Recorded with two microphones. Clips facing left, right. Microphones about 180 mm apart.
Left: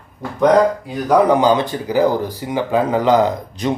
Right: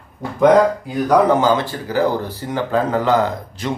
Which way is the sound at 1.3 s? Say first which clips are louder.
Left 2 dB; 15° left (ahead or behind).